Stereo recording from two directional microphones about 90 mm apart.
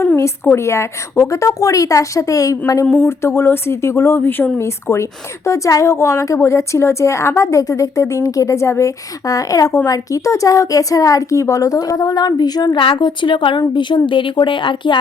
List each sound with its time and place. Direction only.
0.5 s a woman's voice: 30° left (ahead or behind)
2.8 s speech: 10° left (ahead or behind)
3.1 s a woman's voice: 30° left (ahead or behind); by 14.9 s 65° left (ahead or behind)